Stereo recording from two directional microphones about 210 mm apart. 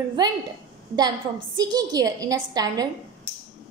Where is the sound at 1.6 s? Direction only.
20° right (ahead or behind).